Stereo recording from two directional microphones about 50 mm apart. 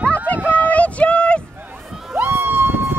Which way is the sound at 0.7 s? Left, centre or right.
Left.